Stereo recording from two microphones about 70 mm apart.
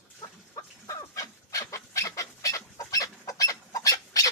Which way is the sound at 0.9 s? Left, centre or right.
Left.